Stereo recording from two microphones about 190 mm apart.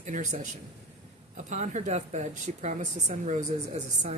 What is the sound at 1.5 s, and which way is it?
Speech, 40° right (ahead or behind).